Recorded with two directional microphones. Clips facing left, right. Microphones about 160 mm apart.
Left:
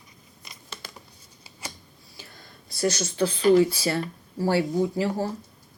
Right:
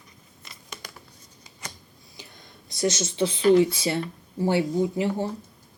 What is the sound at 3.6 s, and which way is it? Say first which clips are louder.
Speech: even; 20° right (ahead or behind).